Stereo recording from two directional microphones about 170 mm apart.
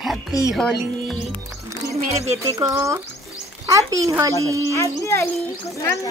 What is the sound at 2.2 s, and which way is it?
Speech, 20° right (ahead or behind).